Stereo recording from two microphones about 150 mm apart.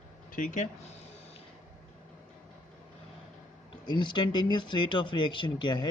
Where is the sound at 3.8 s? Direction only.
30° left (ahead or behind).